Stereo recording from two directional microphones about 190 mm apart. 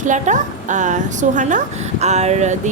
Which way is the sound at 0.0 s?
40° right (ahead or behind).